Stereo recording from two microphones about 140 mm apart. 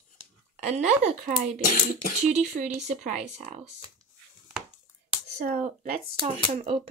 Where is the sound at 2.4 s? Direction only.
55° right (ahead or behind).